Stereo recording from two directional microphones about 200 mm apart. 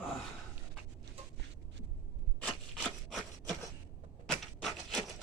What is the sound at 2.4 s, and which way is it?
Rub, 5° left (ahead or behind).